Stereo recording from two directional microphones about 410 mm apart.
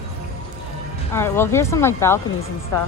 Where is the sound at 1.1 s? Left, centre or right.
Centre.